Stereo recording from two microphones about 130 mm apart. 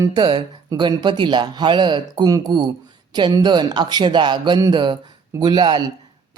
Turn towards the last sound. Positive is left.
turn(degrees=-35)  # may be behind; listen again after turning